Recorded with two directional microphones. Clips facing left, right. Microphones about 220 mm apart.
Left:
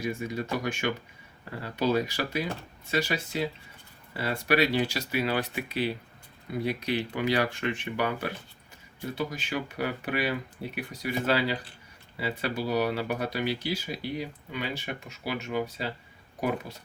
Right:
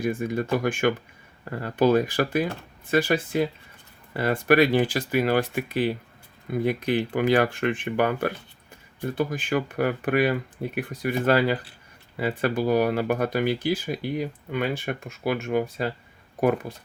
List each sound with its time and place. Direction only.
0.0 s speech: 50° right (ahead or behind)